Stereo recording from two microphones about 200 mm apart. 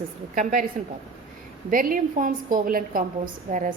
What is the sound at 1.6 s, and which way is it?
A woman's voice, 45° right (ahead or behind).